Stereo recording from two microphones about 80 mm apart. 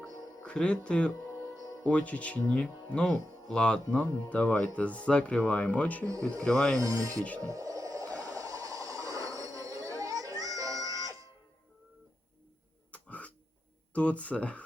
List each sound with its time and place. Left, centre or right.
0.4 s speech: centre
6.7 s rub: right
7.2 s speech: centre
7.4 s a sound: right
12.9 s cough: centre
13.9 s speech: centre